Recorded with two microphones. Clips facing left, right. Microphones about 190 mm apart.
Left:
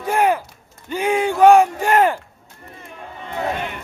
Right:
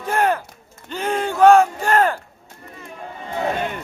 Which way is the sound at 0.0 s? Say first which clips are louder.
Left 2 dB; 10° left (ahead or behind).